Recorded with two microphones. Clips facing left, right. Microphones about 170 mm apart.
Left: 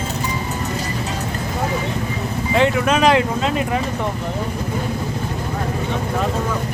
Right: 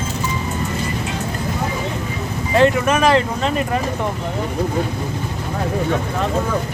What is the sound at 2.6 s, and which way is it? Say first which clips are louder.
Speech: right 2 dB; 15° left (ahead or behind).